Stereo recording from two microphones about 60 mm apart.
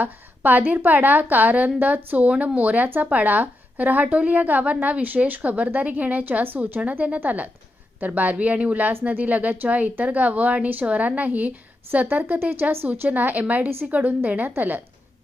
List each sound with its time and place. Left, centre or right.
0.0 s a woman's voice: right